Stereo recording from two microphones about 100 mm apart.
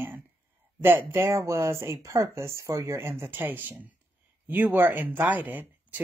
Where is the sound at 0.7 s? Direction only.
20° right (ahead or behind).